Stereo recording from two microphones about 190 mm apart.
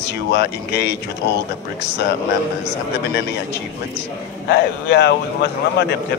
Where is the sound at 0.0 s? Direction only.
60° left (ahead or behind).